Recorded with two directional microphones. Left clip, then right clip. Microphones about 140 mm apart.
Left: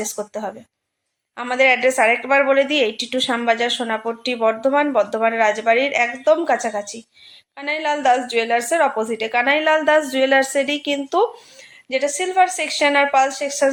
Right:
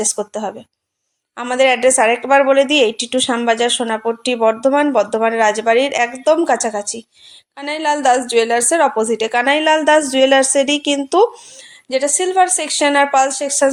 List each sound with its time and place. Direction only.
0.0 s speech: 35° right (ahead or behind)